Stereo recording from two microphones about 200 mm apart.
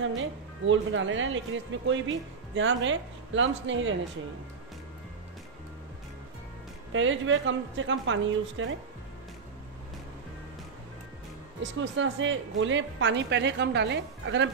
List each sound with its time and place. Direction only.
0.0 s speech: 70° right (ahead or behind)
6.9 s speech: 75° right (ahead or behind)
11.8 s speech: 70° right (ahead or behind)